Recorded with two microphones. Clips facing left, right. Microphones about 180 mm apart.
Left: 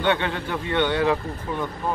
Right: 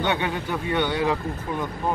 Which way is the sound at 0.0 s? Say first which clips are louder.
Left 2 dB; 15° right (ahead or behind).